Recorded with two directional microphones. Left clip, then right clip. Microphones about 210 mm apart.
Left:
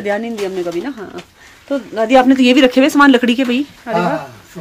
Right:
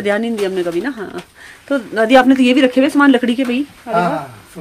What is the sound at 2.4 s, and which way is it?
Speech, 15° left (ahead or behind).